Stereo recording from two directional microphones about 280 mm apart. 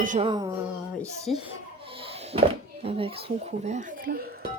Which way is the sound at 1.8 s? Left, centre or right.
Centre.